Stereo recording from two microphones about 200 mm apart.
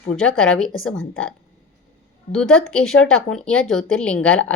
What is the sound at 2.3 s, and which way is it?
Speech, 5° left (ahead or behind).